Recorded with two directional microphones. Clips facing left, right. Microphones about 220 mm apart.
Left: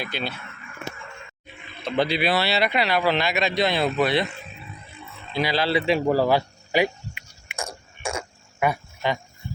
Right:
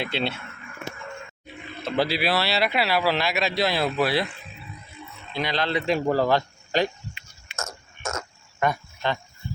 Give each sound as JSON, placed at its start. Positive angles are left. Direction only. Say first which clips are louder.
{"t": 0.0, "sound": "speech", "louder": "right 3 dB", "side_deg": -25}
{"t": 1.8, "sound": "speech", "louder": "left 1 dB", "side_deg": -5}
{"t": 5.3, "sound": "cricket", "louder": "left 3 dB", "side_deg": 5}
{"t": 8.0, "sound": "frog", "louder": "left 2 dB", "side_deg": 10}